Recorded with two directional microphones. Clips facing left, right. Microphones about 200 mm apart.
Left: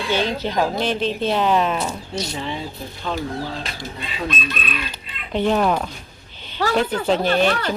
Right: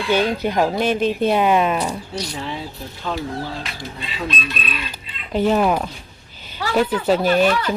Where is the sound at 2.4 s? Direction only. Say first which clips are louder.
Left 1 dB; centre (ahead or behind).